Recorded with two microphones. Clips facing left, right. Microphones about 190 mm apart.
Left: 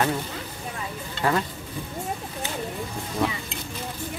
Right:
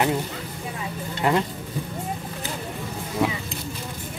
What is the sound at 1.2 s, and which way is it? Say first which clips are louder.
Speech: right 2 dB; 20° right (ahead or behind).